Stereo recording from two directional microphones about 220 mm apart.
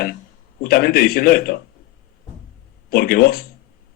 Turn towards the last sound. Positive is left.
turn(degrees=45)  # may be behind; listen again after turning